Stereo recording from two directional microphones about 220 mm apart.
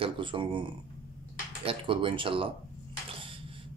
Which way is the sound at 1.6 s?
25° right (ahead or behind).